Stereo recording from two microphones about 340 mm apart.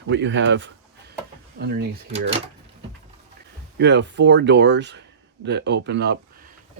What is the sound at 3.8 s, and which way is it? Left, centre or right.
Speech, right.